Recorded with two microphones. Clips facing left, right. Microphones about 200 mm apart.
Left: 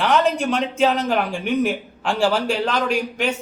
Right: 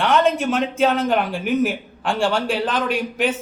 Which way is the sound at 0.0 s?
Centre (ahead or behind).